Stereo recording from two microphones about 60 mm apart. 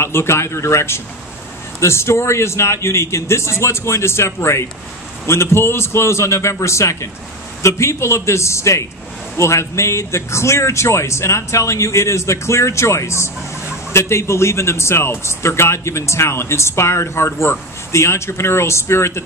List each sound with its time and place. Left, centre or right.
0.0 s a man's voice: left